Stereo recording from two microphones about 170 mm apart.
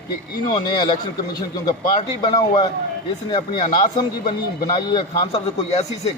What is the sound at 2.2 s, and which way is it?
A man's voice, 25° left (ahead or behind).